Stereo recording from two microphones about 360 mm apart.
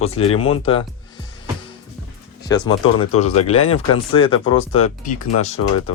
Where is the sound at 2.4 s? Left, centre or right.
Centre.